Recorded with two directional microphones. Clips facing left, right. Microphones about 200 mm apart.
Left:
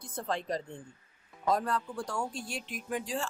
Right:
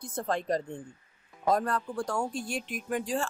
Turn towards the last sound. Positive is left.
turn(degrees=-50)  # may be behind; listen again after turning